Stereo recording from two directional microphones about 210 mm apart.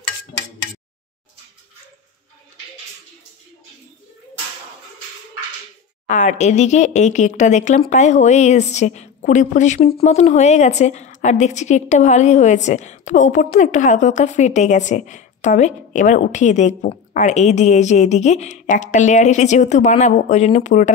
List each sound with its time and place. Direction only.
6.0 s a woman's voice: 35° left (ahead or behind)